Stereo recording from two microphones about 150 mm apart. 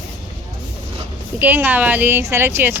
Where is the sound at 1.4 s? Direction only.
10° right (ahead or behind).